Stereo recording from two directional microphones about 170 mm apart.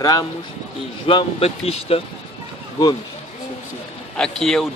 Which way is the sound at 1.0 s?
35° left (ahead or behind).